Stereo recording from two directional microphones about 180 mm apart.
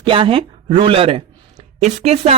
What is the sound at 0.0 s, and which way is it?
A man's voice, 30° right (ahead or behind).